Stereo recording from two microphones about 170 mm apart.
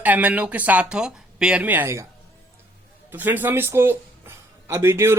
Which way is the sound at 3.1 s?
10° right (ahead or behind).